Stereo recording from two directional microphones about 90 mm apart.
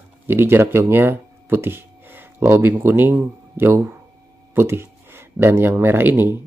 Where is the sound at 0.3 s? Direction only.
25° right (ahead or behind).